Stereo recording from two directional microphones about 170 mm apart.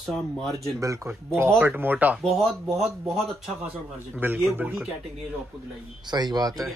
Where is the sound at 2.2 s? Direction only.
Centre (ahead or behind).